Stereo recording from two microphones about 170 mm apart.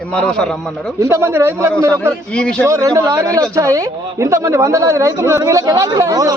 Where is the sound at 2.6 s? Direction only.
20° right (ahead or behind).